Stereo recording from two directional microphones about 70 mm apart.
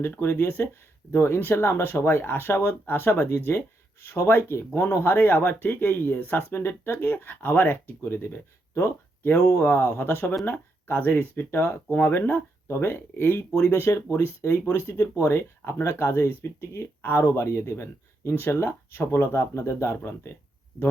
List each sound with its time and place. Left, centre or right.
0.0 s speech: left
17.2 s speech: left